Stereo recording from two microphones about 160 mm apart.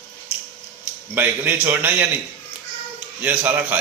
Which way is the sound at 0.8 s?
10° right (ahead or behind).